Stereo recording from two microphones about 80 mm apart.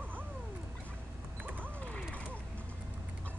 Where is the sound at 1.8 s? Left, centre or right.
Centre.